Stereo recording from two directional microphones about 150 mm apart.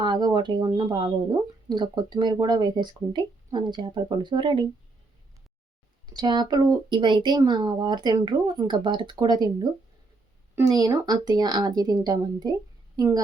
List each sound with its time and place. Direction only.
0.0 s speech: 30° right (ahead or behind)
6.1 s speech: 30° right (ahead or behind)
10.5 s speech: 25° right (ahead or behind)